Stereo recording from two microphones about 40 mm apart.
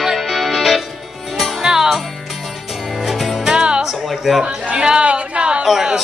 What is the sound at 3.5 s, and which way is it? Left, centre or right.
Music, right.